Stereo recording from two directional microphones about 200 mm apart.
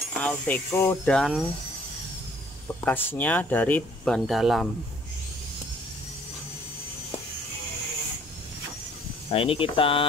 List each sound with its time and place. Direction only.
0.2 s speech: 5° left (ahead or behind)
2.8 s speech: 10° left (ahead or behind)
9.3 s speech: 30° left (ahead or behind)